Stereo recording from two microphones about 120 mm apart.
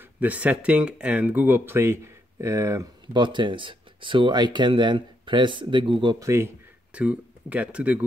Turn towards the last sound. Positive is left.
turn(degrees=-10)  # may be behind; listen again after turning